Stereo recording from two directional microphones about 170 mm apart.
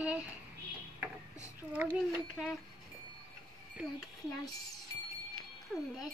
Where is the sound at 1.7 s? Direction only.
10° right (ahead or behind).